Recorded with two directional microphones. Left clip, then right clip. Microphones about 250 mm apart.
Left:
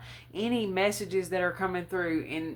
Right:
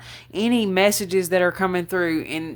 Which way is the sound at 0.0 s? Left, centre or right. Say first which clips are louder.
Right 9 dB; right.